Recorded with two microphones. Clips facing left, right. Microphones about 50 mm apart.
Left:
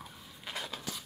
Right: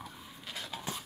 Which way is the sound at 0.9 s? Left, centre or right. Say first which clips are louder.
Right 2 dB; right.